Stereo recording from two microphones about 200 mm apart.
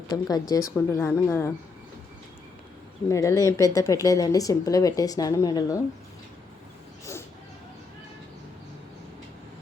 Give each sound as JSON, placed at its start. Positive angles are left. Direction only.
{"t": 0.1, "sound": "speech", "side_deg": 20}
{"t": 3.1, "sound": "speech", "side_deg": 15}
{"t": 7.0, "sound": "a sound", "side_deg": 15}